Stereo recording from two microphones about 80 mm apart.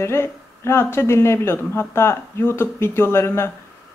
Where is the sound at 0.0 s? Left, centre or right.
Left.